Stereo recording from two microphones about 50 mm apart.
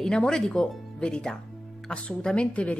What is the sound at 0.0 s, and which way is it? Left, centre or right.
Speech, centre.